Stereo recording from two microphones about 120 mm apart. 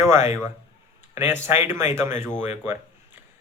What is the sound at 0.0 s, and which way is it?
Speech, 20° right (ahead or behind).